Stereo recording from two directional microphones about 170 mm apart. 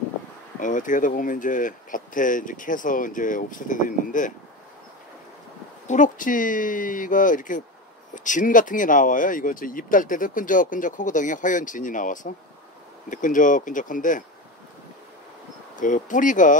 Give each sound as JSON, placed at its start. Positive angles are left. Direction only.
{"t": 0.6, "sound": "speech", "side_deg": 50}
{"t": 5.9, "sound": "speech", "side_deg": 50}
{"t": 15.8, "sound": "speech", "side_deg": 50}